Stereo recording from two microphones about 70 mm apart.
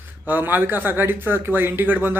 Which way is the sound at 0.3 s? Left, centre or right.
Right.